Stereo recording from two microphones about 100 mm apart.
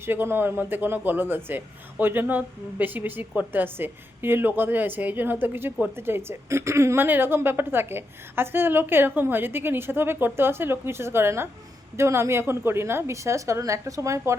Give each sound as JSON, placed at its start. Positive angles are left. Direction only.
{"t": 0.0, "sound": "a woman's voice", "side_deg": -25}